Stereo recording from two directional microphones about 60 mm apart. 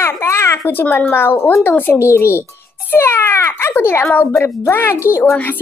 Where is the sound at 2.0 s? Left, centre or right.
Left.